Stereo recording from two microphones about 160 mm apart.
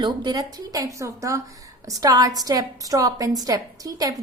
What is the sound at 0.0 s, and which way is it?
A woman's voice, 30° right (ahead or behind).